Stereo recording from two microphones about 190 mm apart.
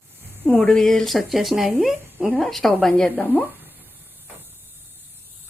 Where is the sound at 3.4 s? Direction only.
10° right (ahead or behind).